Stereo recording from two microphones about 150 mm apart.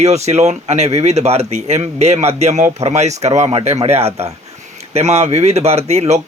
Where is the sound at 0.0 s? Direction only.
45° right (ahead or behind).